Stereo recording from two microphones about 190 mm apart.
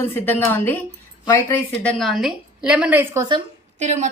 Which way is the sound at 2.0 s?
Centre (ahead or behind).